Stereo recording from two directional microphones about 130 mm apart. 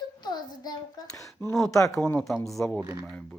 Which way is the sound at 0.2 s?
35° left (ahead or behind).